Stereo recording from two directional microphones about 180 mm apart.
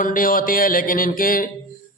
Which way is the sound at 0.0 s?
50° left (ahead or behind).